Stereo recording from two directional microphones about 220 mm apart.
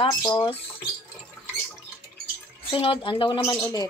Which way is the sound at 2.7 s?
25° left (ahead or behind).